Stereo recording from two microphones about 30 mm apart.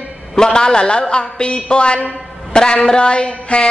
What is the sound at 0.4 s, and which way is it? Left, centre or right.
A man's voice, left.